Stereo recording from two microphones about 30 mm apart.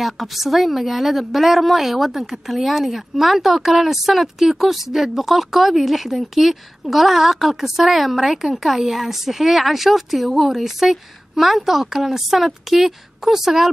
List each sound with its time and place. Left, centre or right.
0.0 s a woman's voice: centre